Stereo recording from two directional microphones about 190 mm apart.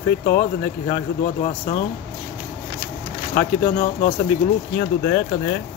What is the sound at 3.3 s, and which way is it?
Speech, 50° left (ahead or behind).